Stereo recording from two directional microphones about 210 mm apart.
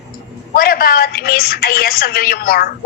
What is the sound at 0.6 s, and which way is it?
A woman's voice, 45° left (ahead or behind).